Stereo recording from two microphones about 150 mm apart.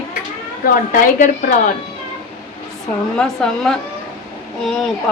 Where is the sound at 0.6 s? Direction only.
60° left (ahead or behind).